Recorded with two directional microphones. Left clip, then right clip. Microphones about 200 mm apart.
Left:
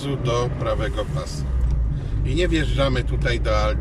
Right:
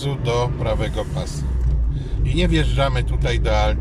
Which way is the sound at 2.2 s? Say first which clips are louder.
Right 1 dB; 15° right (ahead or behind).